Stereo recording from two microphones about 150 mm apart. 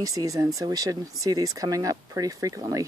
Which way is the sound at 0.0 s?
20° right (ahead or behind).